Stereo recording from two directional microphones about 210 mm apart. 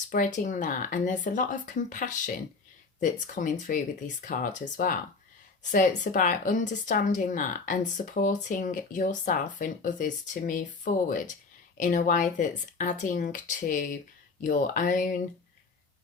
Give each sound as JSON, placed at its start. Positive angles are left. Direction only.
{"t": 0.1, "sound": "speech", "side_deg": 40}
{"t": 5.7, "sound": "speech", "side_deg": 40}